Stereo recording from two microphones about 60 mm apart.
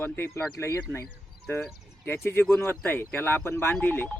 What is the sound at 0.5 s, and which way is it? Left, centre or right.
Speech, left.